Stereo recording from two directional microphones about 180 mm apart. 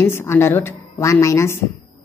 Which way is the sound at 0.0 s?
15° left (ahead or behind).